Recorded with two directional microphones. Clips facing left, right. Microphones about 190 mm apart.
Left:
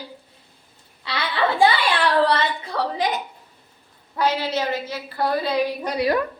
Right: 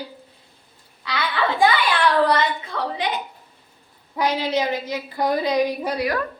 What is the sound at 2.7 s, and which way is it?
Speech, 35° left (ahead or behind).